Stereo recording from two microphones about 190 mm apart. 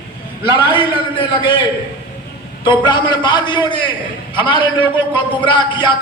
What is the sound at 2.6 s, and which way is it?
A man's voice, 25° left (ahead or behind).